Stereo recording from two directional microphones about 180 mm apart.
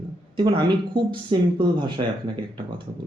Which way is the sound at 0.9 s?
25° right (ahead or behind).